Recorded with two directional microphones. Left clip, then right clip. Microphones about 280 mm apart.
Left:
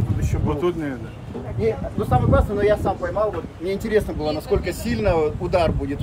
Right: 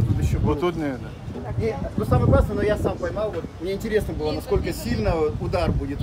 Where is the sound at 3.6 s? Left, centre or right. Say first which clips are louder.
Left 3 dB; centre.